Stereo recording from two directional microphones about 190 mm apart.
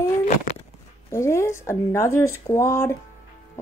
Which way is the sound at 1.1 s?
15° left (ahead or behind).